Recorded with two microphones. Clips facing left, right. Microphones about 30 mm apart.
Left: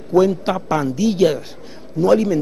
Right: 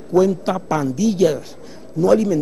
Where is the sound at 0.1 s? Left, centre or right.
Left.